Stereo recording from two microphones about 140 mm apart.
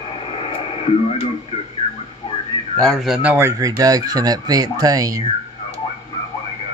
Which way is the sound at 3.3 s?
20° right (ahead or behind).